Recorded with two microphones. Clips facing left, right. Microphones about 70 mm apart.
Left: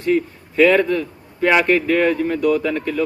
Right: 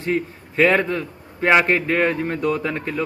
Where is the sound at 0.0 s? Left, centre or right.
Right.